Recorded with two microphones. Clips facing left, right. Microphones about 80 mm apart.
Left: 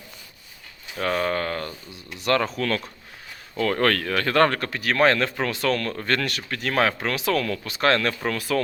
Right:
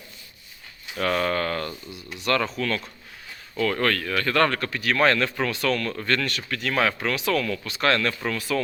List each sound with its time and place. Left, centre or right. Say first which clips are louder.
0.9 s speech: even; centre
2.2 s speech: left 2 dB; left
2.6 s speech: left 2 dB; left
8.3 s speech: left 3 dB; left